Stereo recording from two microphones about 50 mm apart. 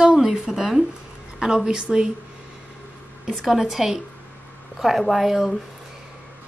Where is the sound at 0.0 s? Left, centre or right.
Centre.